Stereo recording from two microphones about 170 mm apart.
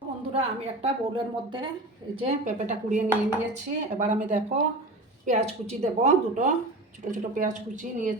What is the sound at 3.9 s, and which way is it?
A woman's voice, 45° right (ahead or behind).